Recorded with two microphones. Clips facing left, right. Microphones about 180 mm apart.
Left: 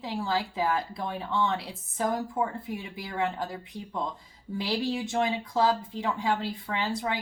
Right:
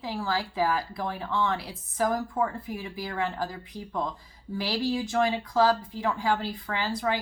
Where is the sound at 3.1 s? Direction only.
20° left (ahead or behind).